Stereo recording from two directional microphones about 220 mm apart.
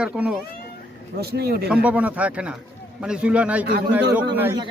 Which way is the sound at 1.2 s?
45° right (ahead or behind).